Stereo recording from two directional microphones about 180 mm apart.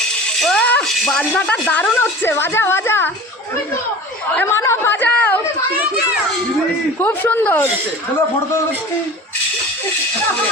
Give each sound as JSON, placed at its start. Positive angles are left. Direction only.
{"t": 0.3, "sound": "music", "side_deg": 5}
{"t": 1.5, "sound": "a woman's voice", "side_deg": 5}
{"t": 4.4, "sound": "a woman's voice", "side_deg": 15}
{"t": 7.0, "sound": "a woman's voice", "side_deg": 10}